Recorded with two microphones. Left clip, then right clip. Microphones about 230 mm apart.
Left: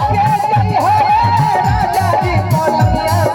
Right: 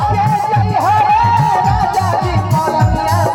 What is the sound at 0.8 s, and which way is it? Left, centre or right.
Music, left.